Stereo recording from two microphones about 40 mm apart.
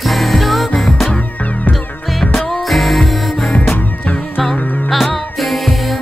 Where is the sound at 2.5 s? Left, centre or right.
Centre.